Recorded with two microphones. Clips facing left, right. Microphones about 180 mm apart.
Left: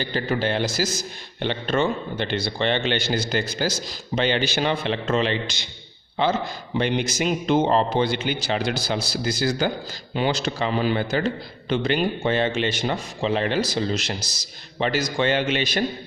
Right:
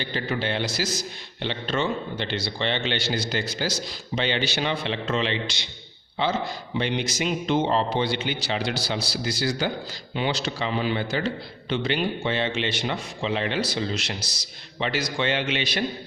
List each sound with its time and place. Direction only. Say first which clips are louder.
0.0 s a man's voice: left 4 dB; 45° left (ahead or behind)
6.7 s a man's voice: left 3 dB; 50° left (ahead or behind)